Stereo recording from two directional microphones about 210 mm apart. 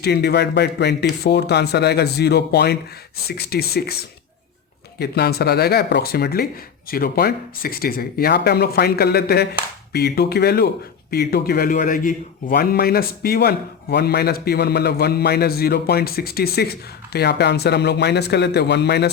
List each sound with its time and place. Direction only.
0.0 s a man's voice: 50° left (ahead or behind)
4.9 s a man's voice: 50° left (ahead or behind)